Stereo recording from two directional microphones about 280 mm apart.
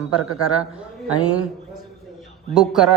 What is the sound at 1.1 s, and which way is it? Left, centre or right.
Speech, left.